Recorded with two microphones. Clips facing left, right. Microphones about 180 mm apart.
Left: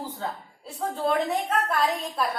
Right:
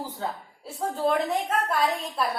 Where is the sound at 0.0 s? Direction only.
5° right (ahead or behind).